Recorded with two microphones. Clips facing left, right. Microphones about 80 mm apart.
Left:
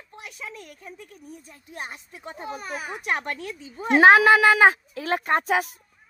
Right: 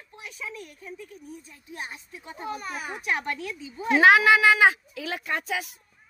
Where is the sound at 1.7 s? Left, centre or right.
Left.